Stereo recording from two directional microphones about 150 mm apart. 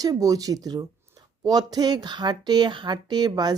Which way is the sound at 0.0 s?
25° right (ahead or behind).